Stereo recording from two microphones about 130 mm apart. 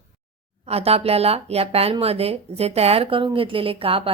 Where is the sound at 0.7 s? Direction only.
50° right (ahead or behind).